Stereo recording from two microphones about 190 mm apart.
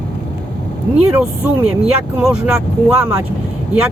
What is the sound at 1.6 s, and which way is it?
Speech, 5° right (ahead or behind).